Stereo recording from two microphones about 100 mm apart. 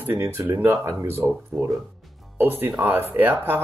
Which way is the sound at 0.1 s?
25° right (ahead or behind).